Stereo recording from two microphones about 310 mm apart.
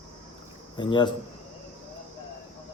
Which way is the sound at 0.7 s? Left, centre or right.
Centre.